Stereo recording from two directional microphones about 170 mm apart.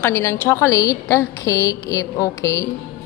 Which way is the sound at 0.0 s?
15° left (ahead or behind).